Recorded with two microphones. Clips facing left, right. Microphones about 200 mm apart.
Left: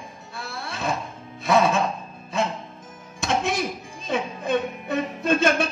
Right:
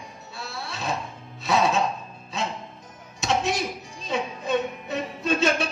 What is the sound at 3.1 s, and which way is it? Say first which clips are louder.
Music: left 1 dB; 55° left (ahead or behind).